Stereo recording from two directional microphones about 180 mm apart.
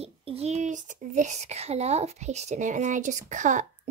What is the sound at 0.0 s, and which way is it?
Speech, 35° right (ahead or behind).